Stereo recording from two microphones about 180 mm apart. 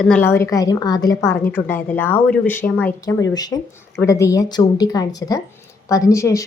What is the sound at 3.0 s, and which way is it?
Speech, 20° left (ahead or behind).